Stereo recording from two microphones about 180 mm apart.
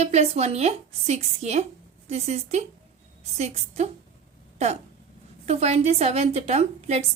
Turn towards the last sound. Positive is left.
turn(degrees=-40)  # may be behind; listen again after turning